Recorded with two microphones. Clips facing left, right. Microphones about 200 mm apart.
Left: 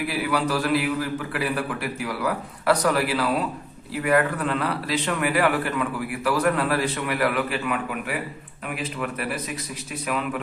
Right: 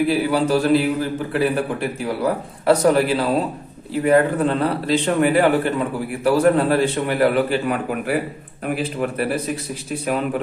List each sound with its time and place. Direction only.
0.1 s a man's voice: 30° right (ahead or behind)